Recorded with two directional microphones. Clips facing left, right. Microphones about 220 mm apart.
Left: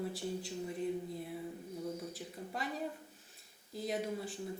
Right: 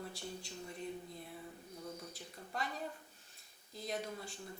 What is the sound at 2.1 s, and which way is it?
Speech, 5° left (ahead or behind).